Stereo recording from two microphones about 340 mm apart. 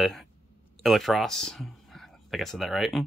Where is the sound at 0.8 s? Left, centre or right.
Centre.